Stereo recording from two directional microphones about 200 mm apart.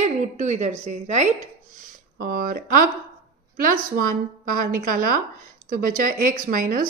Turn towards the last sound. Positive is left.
turn(degrees=-45)  # may be behind; listen again after turning